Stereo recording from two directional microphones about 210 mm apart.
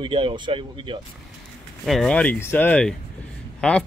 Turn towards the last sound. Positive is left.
turn(degrees=5)  # may be behind; listen again after turning